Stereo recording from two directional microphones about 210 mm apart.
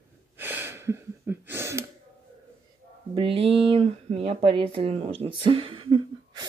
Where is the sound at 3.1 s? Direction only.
25° right (ahead or behind).